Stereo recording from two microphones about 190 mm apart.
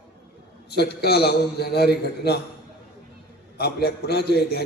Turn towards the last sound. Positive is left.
turn(degrees=60)  # may be behind; listen again after turning